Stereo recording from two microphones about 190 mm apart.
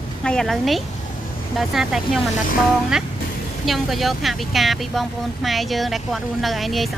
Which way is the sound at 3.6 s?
Centre (ahead or behind).